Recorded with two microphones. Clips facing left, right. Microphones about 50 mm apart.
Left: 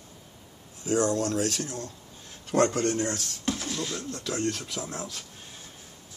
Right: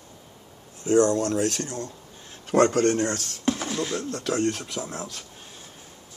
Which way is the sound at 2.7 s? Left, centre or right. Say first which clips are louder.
Right 5 dB; right.